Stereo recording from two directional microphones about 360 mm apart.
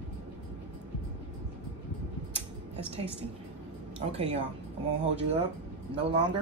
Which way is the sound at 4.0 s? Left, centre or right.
Centre.